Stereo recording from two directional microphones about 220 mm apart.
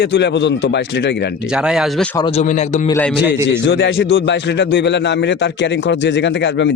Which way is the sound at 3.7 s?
60° left (ahead or behind).